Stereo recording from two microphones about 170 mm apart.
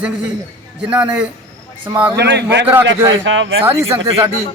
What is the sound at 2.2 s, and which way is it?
A man's voice, 80° right.